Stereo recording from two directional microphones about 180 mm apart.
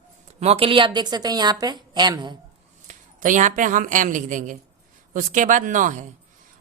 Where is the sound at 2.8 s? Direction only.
45° right (ahead or behind).